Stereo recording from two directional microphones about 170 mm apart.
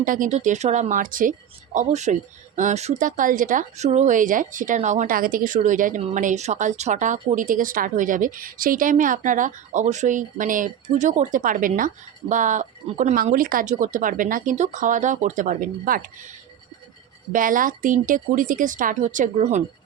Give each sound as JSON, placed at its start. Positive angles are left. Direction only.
{"t": 0.0, "sound": "speech", "side_deg": -50}
{"t": 17.3, "sound": "speech", "side_deg": -50}